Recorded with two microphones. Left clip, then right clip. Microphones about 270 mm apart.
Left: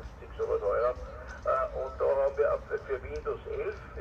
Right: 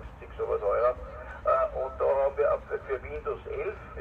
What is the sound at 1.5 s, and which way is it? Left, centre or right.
Speech, right.